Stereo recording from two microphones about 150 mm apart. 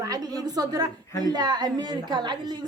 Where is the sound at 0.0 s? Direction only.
25° right (ahead or behind).